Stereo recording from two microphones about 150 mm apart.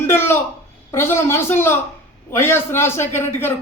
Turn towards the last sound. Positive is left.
turn(degrees=15)  # may be behind; listen again after turning